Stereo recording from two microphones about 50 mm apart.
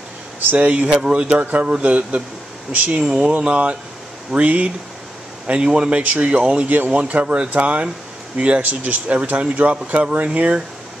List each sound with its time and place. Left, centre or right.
0.6 s speech: right
1.4 s speech: right